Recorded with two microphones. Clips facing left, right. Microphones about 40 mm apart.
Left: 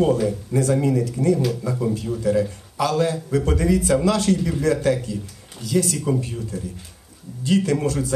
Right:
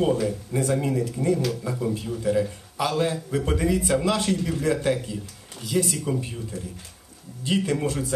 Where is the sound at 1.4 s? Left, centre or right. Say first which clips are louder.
Left 3 dB; centre.